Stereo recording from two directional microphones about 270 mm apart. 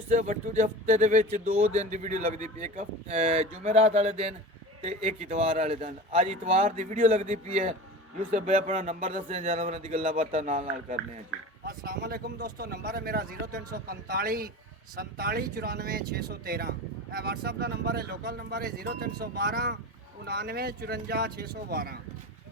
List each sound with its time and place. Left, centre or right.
0.1 s speech: right